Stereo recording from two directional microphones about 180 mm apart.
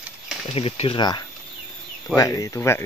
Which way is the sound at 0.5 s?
30° left (ahead or behind).